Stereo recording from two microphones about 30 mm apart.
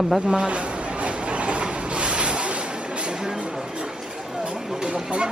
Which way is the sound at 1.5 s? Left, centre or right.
Right.